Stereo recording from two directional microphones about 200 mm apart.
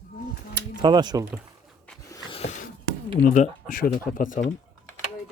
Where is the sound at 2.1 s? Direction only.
20° left (ahead or behind).